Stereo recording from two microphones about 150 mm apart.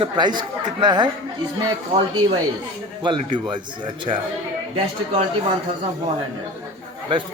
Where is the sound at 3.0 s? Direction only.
30° right (ahead or behind).